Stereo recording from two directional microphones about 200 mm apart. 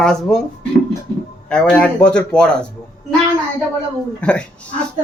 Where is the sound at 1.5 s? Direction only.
5° left (ahead or behind).